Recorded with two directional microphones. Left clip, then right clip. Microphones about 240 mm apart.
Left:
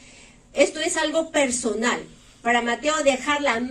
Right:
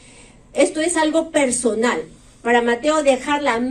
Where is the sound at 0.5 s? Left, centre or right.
Right.